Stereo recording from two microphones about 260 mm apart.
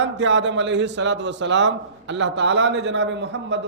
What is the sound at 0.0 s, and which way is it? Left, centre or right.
A man's voice, right.